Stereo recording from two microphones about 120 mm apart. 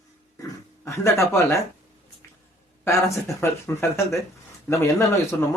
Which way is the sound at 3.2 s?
20° left (ahead or behind).